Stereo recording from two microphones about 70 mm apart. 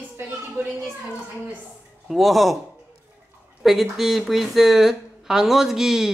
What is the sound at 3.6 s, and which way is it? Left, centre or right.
Speech, centre.